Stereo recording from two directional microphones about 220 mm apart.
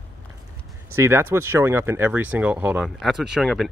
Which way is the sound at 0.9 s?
10° right (ahead or behind).